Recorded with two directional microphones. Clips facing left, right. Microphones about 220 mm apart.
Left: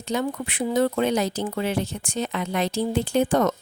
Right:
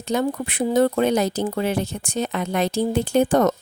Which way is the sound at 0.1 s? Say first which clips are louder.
Right 3 dB; 40° right (ahead or behind).